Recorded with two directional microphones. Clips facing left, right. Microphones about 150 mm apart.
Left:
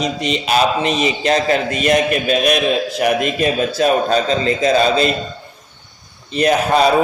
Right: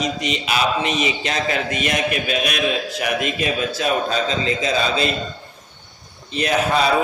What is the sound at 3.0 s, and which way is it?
A man's voice, 40° left (ahead or behind).